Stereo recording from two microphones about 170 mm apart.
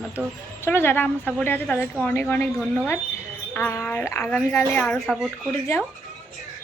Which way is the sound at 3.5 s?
15° left (ahead or behind).